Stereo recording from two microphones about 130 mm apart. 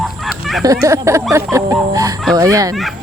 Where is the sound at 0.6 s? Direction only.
25° right (ahead or behind).